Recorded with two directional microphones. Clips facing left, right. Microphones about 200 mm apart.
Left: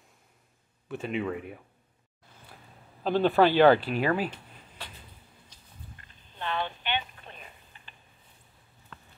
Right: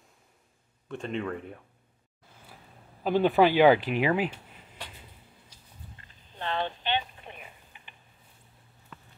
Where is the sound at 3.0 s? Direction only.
15° right (ahead or behind).